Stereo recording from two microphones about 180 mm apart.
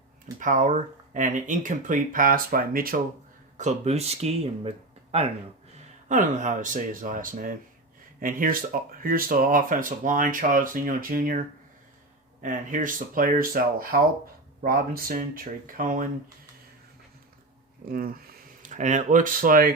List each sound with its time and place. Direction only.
0.3 s speech: 45° right (ahead or behind)
3.6 s speech: 40° right (ahead or behind)
5.7 s speech: 45° right (ahead or behind)
17.8 s speech: 55° right (ahead or behind)